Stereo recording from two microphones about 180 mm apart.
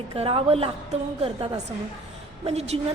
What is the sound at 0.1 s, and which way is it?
A woman's voice, 30° right (ahead or behind).